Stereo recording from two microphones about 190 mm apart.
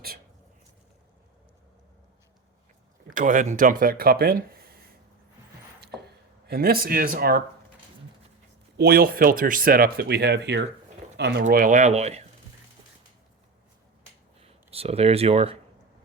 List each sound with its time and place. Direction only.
3.1 s speech: 45° right (ahead or behind)
6.5 s speech: 55° right (ahead or behind)
8.8 s speech: 55° right (ahead or behind)
11.4 s speech: 45° right (ahead or behind)
14.4 s speech: 30° right (ahead or behind)